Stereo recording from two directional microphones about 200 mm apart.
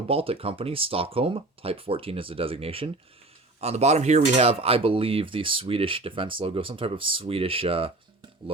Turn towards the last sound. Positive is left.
turn(degrees=-25)  # may be behind; listen again after turning